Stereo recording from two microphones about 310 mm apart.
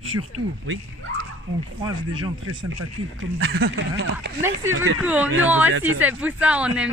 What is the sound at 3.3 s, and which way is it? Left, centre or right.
Speech, right.